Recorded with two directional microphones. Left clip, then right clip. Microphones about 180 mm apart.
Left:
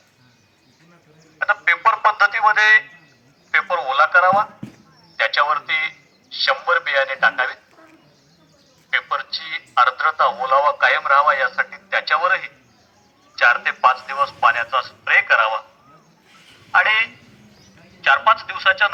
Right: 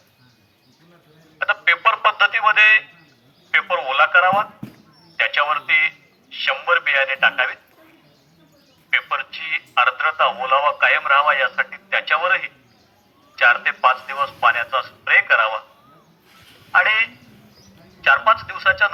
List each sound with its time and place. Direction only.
1.4 s speech: 30° right (ahead or behind)
3.5 s radio: 15° right (ahead or behind)
5.2 s a sound: 10° right (ahead or behind)
10.0 s a man's voice: centre (ahead or behind); by 15.6 s 15° right (ahead or behind)
16.7 s telephone: 20° right (ahead or behind)
18.0 s a man's voice: 25° right (ahead or behind)